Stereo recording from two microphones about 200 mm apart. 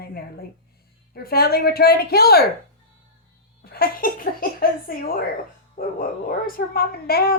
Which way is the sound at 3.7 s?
50° left (ahead or behind).